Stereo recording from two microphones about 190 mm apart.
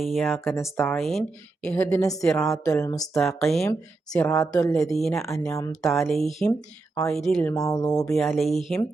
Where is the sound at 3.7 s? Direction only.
15° left (ahead or behind).